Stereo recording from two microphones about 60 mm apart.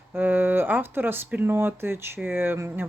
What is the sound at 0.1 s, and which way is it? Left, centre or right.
Speech, right.